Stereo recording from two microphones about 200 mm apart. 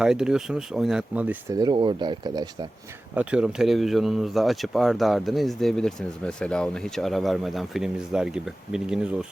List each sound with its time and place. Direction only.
0.0 s speech: 5° right (ahead or behind)
1.5 s speech: 25° right (ahead or behind)
3.2 s speech: 5° right (ahead or behind)